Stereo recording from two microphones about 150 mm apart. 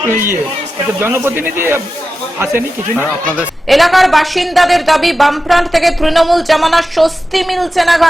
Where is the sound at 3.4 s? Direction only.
Centre (ahead or behind).